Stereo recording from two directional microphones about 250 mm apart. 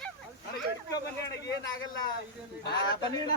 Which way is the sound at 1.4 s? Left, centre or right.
Centre.